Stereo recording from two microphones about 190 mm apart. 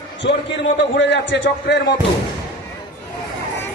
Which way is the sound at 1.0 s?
70° left (ahead or behind).